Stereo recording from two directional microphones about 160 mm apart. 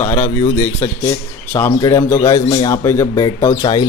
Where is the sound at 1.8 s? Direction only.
25° left (ahead or behind).